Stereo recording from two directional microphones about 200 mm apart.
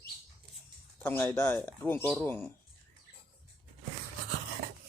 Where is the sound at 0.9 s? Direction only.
10° left (ahead or behind).